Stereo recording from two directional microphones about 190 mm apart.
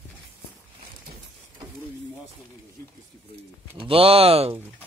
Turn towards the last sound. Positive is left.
turn(degrees=-30)  # may be behind; listen again after turning